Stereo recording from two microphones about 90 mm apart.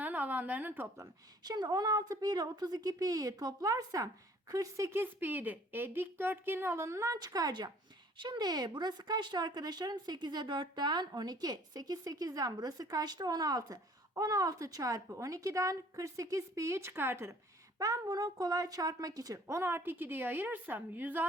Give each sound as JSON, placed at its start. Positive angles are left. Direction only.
{"t": 0.0, "sound": "a woman's voice", "side_deg": -20}
{"t": 1.5, "sound": "speech", "side_deg": -50}
{"t": 4.9, "sound": "a woman's voice", "side_deg": -25}
{"t": 7.2, "sound": "speech", "side_deg": -45}
{"t": 17.7, "sound": "speech", "side_deg": -40}